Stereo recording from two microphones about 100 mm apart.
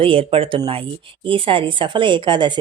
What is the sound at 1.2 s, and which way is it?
Speech, 60° right (ahead or behind).